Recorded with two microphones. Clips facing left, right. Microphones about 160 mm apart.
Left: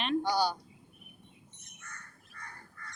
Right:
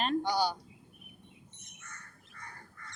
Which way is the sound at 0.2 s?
15° right (ahead or behind).